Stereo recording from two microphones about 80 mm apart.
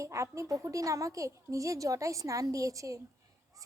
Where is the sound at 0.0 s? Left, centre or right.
Right.